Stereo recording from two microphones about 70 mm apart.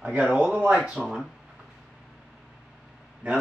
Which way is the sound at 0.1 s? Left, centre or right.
Centre.